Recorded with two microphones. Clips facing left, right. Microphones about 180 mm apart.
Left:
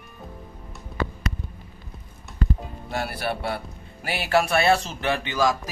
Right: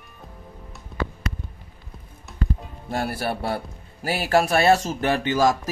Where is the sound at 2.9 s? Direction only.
45° right (ahead or behind).